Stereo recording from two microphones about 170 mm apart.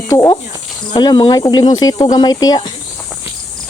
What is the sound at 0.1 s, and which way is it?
Insect, 20° left (ahead or behind).